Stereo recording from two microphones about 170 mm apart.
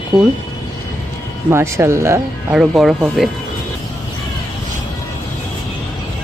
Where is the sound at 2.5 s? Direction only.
5° right (ahead or behind).